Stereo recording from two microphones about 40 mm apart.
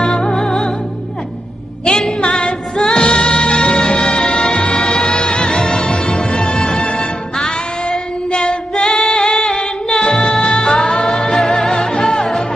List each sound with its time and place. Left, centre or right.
0.0 s music: centre
1.9 s music: centre
8.3 s female singing: left
8.7 s music: centre